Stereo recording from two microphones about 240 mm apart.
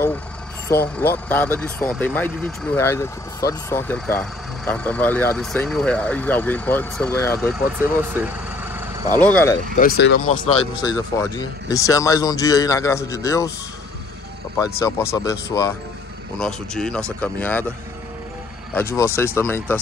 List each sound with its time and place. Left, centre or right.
0.7 s speech: centre
7.5 s speech: centre
9.2 s speech: centre
9.8 s speech: left
10.8 s speech: centre
14.8 s speech: centre
16.3 s speech: centre
18.8 s speech: centre